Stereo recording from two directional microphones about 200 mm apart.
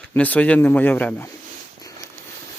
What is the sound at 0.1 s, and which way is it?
Speech, 10° left (ahead or behind).